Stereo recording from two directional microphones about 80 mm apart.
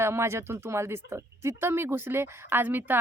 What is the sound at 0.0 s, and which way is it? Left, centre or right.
A woman's voice, right.